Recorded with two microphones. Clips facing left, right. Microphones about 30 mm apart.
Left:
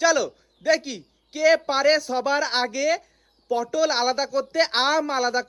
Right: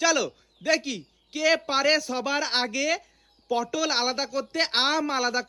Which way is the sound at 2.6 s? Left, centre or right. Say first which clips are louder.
Left 3 dB; centre.